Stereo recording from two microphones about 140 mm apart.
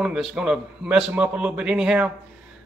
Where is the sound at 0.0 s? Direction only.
5° right (ahead or behind).